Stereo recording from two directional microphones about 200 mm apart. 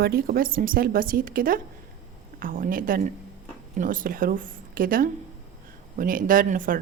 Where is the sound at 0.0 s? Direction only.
50° right (ahead or behind).